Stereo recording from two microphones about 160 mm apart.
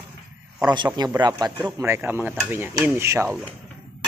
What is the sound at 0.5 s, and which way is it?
Speech, 25° right (ahead or behind).